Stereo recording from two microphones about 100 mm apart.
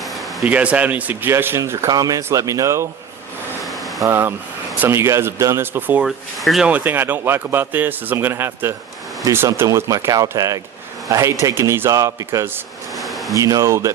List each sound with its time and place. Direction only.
0.0 s a sound: centre (ahead or behind)
0.4 s a man's voice: 15° right (ahead or behind)
1.9 s a man's voice: 40° right (ahead or behind)
3.6 s a sound: centre (ahead or behind)
4.0 s a man's voice: 25° right (ahead or behind)
6.0 s speech: centre (ahead or behind)
6.7 s a man's voice: 15° right (ahead or behind)
13.0 s a sound: centre (ahead or behind)
13.3 s a man's voice: 35° right (ahead or behind)